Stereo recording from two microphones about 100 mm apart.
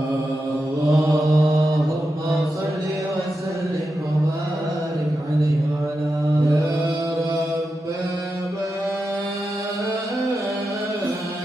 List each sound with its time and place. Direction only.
0.9 s mantra: 30° right (ahead or behind)